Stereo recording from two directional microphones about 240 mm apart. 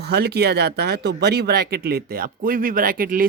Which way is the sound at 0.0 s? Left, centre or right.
Right.